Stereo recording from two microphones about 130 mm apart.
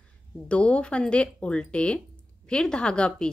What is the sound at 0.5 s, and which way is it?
A woman's voice, 10° left (ahead or behind).